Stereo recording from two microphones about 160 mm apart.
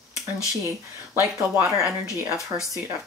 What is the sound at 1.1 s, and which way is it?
Speech, 10° right (ahead or behind).